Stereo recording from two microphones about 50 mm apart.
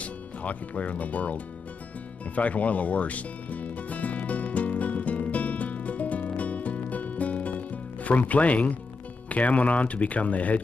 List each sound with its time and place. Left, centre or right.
0.0 s speech: left
2.3 s music: left
9.3 s speech: left